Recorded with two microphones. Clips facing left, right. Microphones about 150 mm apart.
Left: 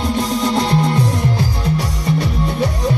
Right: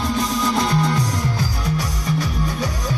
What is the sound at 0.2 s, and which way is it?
Music, 30° left (ahead or behind).